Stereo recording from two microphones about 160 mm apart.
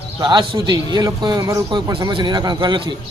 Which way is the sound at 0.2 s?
30° right (ahead or behind).